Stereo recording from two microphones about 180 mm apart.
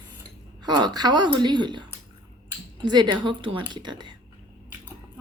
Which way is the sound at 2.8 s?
25° right (ahead or behind).